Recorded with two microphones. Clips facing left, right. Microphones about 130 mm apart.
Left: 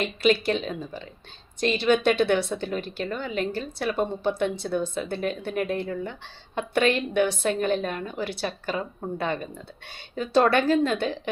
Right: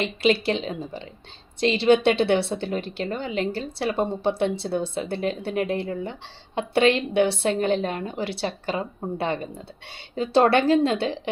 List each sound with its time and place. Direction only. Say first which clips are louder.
0.0 s a woman's voice: right 1 dB; 25° right (ahead or behind)